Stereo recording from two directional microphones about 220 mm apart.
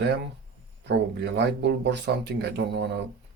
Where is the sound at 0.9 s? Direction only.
50° right (ahead or behind).